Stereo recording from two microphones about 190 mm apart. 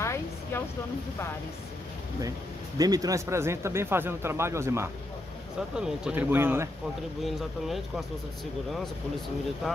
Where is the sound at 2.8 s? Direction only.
20° right (ahead or behind).